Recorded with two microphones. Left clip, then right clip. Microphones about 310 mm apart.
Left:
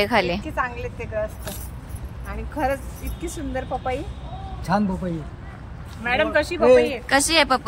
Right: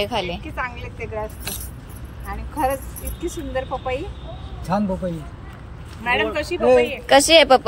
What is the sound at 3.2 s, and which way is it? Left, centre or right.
Speech, centre.